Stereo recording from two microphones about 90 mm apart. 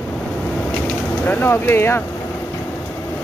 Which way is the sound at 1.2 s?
20° left (ahead or behind).